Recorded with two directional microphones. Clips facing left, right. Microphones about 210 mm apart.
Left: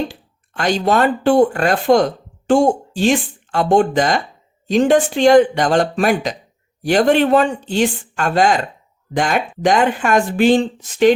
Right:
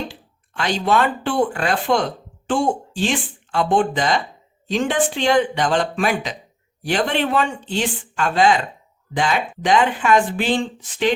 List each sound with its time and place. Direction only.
0.1 s speech: 45° left (ahead or behind)